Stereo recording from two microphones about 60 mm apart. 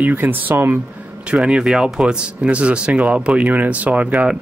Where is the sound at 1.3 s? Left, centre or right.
Centre.